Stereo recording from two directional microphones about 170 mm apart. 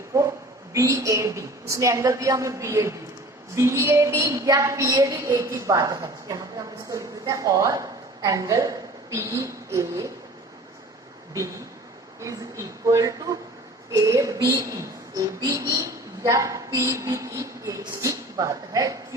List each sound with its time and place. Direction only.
0.1 s a sound: 20° right (ahead or behind)
0.7 s a woman's voice: 20° right (ahead or behind)
12.2 s speech: 20° right (ahead or behind)